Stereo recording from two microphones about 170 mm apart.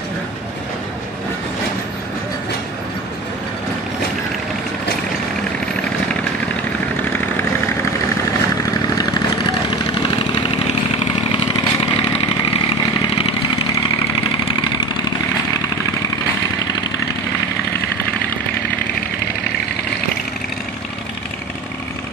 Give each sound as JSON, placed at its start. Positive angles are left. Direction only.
{"t": 8.3, "sound": "vehicle", "side_deg": 20}
{"t": 14.6, "sound": "vehicle", "side_deg": 25}